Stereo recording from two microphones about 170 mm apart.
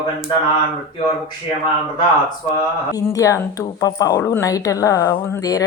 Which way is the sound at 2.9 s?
20° left (ahead or behind).